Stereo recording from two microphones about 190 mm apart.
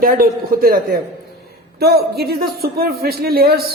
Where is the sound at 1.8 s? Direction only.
55° right (ahead or behind).